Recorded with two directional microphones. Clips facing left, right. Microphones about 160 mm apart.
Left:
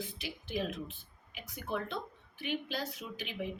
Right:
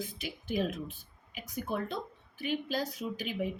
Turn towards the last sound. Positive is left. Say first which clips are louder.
# right 6 dB
turn(degrees=-40)  # may be behind; listen again after turning